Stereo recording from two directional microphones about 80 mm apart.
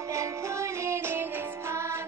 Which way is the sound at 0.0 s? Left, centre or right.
Right.